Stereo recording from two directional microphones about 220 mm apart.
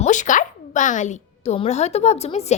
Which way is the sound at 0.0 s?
35° left (ahead or behind).